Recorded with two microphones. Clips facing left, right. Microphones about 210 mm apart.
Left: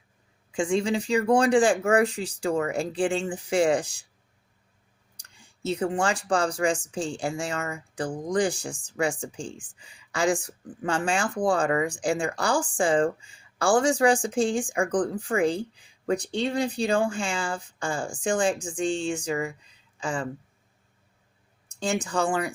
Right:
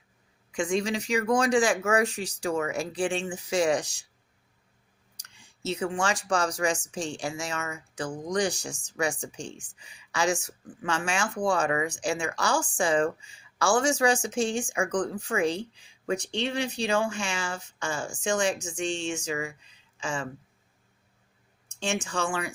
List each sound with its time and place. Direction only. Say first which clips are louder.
0.5 s speech: left 3 dB; 30° left (ahead or behind)
5.2 s speech: left 3 dB; 30° left (ahead or behind)
21.7 s speech: left 3 dB; 35° left (ahead or behind)